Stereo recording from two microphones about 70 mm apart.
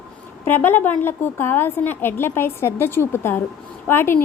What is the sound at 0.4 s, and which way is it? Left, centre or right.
A woman's voice, left.